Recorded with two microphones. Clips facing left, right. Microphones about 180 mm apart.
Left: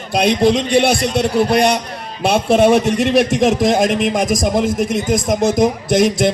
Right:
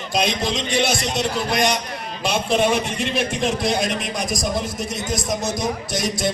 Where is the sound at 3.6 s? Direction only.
50° left (ahead or behind).